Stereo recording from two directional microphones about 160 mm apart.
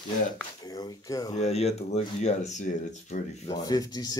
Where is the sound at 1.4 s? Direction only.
40° left (ahead or behind).